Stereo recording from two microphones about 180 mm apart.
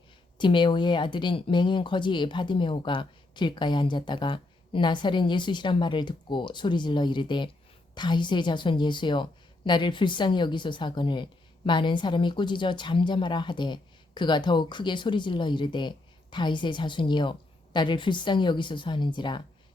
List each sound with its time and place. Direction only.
0.3 s a woman's voice: 25° left (ahead or behind)